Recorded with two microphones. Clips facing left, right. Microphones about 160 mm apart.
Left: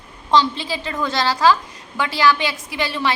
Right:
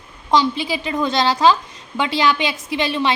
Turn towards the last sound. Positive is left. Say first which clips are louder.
# right 3 dB
turn(degrees=-20)  # may be behind; listen again after turning